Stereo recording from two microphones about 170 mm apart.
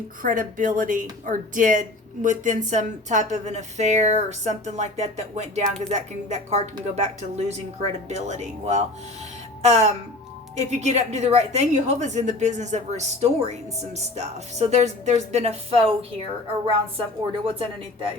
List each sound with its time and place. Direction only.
0.2 s a woman's voice: 50° right (ahead or behind); by 16.0 s 35° right (ahead or behind)
17.4 s a woman's voice: 35° right (ahead or behind)